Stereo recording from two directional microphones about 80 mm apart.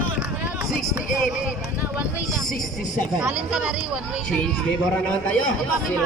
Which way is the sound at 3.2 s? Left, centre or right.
Centre.